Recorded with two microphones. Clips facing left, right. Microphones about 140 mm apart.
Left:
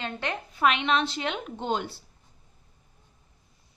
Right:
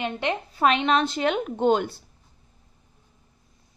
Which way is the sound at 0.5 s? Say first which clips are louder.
Right 3 dB; 35° right (ahead or behind).